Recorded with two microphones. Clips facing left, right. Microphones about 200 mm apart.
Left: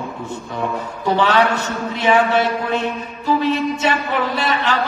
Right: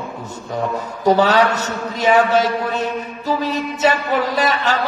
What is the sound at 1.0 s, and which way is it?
Mantra, 40° right (ahead or behind).